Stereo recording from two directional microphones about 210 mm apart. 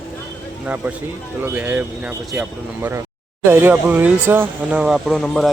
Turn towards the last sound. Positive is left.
turn(degrees=0)  # may be behind; listen again after turning